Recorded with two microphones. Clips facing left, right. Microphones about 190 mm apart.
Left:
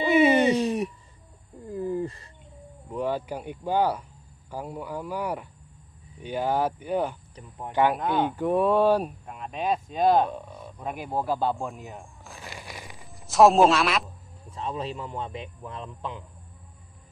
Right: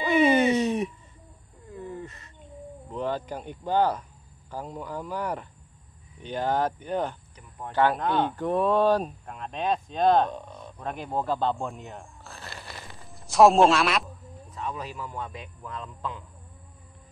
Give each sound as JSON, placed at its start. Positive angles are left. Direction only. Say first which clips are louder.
{"t": 0.1, "sound": "speech", "louder": "left 1 dB", "side_deg": 5}
{"t": 1.7, "sound": "a sound", "louder": "left 9 dB", "side_deg": 30}
{"t": 2.9, "sound": "speech", "louder": "left 2 dB", "side_deg": 10}
{"t": 13.3, "sound": "a man's voice", "louder": "even", "side_deg": 0}
{"t": 14.5, "sound": "a man's voice", "louder": "left 3 dB", "side_deg": 30}